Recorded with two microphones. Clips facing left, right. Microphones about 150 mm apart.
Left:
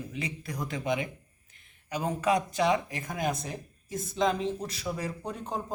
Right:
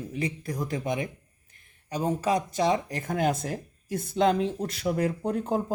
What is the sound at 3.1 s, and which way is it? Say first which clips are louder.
Speech: right 5 dB; 60° right (ahead or behind).